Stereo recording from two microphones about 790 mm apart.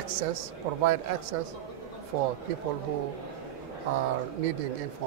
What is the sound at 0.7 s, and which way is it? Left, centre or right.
Speech, right.